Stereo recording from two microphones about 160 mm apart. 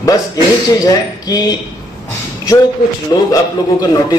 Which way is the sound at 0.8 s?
20° left (ahead or behind).